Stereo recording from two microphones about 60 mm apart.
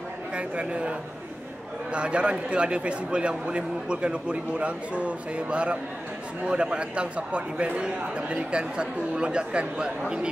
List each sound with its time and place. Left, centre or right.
0.4 s a man's voice: centre